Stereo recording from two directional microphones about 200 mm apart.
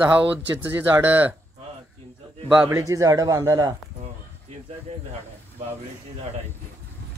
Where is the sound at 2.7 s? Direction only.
15° right (ahead or behind).